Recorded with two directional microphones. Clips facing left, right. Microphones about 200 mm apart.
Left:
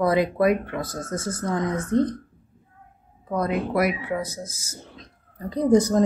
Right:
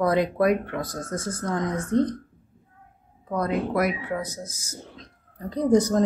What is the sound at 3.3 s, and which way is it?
Speech, 10° left (ahead or behind).